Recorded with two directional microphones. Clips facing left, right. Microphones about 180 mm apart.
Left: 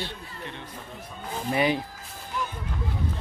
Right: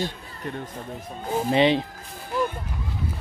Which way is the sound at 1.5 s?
25° right (ahead or behind).